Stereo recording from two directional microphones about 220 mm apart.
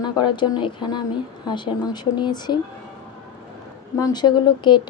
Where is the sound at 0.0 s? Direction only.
20° left (ahead or behind).